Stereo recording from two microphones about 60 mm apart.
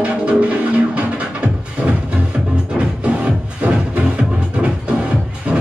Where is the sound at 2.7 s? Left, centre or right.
Right.